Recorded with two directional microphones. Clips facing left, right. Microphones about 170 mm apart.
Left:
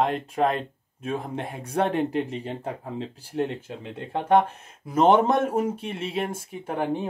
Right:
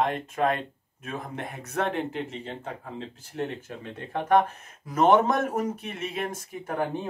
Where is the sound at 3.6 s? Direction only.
25° left (ahead or behind).